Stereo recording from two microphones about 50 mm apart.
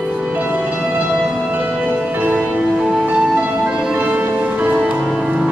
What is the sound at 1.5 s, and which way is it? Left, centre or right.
Music, right.